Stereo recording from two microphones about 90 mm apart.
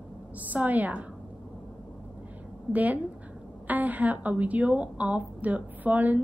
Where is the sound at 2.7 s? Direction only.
15° right (ahead or behind).